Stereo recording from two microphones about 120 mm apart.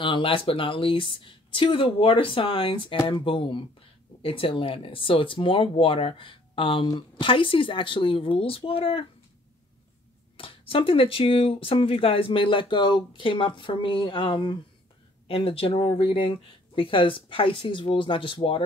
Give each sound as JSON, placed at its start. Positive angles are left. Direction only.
{"t": 0.0, "sound": "speech", "side_deg": 45}
{"t": 10.3, "sound": "speech", "side_deg": 50}